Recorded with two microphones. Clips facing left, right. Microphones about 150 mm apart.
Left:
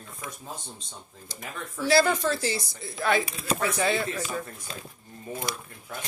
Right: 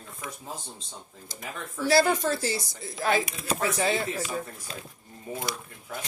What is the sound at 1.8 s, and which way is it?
Speech, 45° right (ahead or behind).